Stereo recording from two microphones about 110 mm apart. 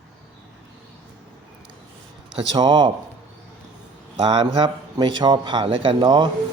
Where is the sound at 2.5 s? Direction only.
45° right (ahead or behind).